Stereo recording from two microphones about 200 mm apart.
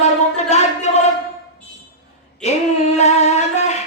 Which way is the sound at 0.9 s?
35° left (ahead or behind).